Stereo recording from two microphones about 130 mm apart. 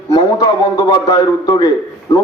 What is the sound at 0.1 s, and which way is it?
A man's voice, 30° left (ahead or behind).